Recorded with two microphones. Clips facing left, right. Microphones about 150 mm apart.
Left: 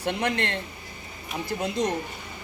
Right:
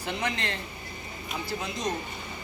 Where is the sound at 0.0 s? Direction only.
60° left (ahead or behind).